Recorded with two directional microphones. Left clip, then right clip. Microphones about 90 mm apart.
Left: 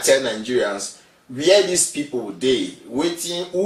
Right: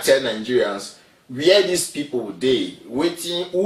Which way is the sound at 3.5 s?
15° right (ahead or behind).